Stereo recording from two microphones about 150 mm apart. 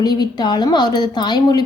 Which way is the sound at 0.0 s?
25° left (ahead or behind).